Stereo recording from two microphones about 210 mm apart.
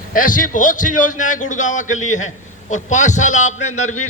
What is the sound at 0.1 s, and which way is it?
A man's voice, 40° left (ahead or behind).